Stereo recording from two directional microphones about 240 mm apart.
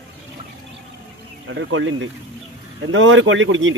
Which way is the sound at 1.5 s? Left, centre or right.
Right.